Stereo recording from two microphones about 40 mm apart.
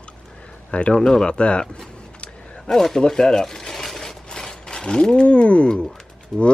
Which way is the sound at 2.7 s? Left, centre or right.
Centre.